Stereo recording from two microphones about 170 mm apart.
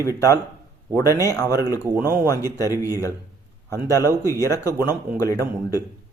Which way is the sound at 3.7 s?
20° left (ahead or behind).